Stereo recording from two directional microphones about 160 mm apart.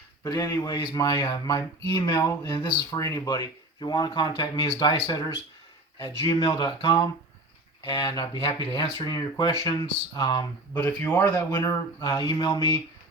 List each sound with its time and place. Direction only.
0.3 s speech: 15° left (ahead or behind)
10.8 s speech: 10° left (ahead or behind)
11.3 s speech: 20° left (ahead or behind)